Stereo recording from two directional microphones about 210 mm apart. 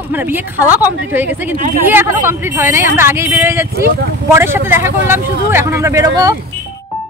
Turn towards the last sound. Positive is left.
turn(degrees=-15)  # may be behind; listen again after turning